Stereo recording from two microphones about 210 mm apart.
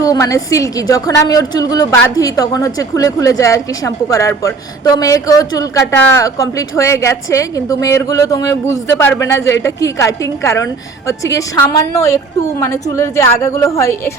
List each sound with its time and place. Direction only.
0.0 s a woman's voice: 15° left (ahead or behind)